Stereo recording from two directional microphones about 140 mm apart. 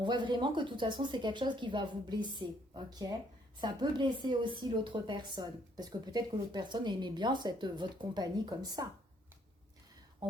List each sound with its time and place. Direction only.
0.0 s speech: 35° right (ahead or behind)